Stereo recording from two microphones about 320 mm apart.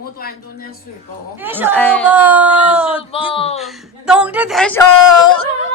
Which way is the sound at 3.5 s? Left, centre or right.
Centre.